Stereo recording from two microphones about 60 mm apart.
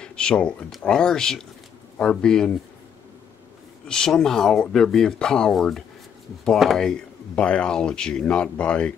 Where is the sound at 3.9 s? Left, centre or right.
Centre.